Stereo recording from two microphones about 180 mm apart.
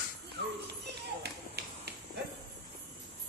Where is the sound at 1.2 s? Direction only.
65° right (ahead or behind).